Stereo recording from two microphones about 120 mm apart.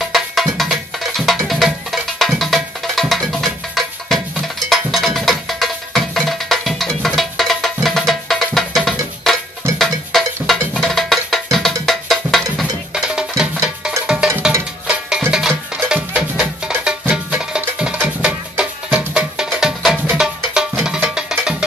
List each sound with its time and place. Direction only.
0.0 s music: centre (ahead or behind)